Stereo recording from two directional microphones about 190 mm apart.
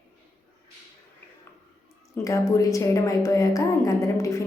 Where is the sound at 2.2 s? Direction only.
15° left (ahead or behind).